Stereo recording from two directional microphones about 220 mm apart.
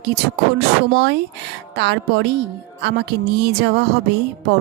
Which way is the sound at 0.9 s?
50° right (ahead or behind).